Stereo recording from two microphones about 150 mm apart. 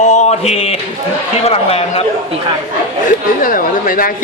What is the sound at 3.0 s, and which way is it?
A man's voice, 65° left (ahead or behind).